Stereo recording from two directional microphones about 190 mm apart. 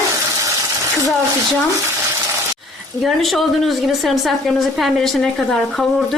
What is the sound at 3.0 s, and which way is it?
A woman's voice, centre (ahead or behind).